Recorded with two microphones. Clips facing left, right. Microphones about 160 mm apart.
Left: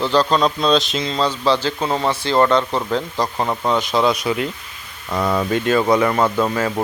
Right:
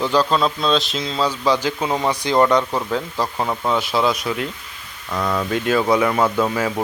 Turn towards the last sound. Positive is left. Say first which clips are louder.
# left 1 dB
turn(degrees=-5)  # may be behind; listen again after turning